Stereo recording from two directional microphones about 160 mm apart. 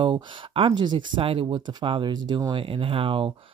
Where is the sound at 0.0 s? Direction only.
30° right (ahead or behind).